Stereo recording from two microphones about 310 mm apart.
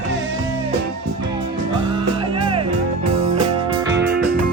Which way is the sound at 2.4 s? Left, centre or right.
Centre.